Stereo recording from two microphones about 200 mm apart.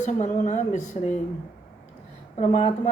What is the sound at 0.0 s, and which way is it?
Speech, 35° left (ahead or behind).